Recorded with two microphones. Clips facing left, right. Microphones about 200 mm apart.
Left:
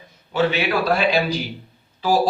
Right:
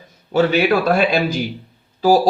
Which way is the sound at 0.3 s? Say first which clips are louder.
Right 5 dB; 45° right (ahead or behind).